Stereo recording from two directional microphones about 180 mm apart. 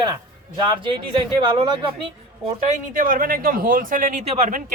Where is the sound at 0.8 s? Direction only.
25° right (ahead or behind).